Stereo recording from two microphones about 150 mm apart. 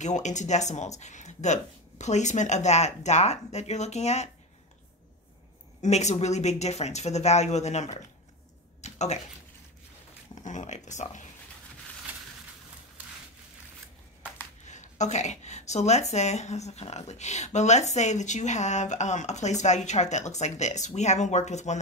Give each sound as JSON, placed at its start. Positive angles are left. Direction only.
{"t": 0.0, "sound": "speech", "side_deg": 50}
{"t": 5.8, "sound": "speech", "side_deg": 50}
{"t": 10.4, "sound": "speech", "side_deg": 50}
{"t": 14.7, "sound": "speech", "side_deg": 50}